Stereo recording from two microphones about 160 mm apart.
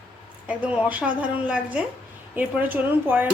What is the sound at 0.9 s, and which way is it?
Speech, 10° right (ahead or behind).